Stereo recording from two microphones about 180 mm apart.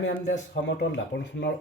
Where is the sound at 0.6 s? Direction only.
75° left (ahead or behind).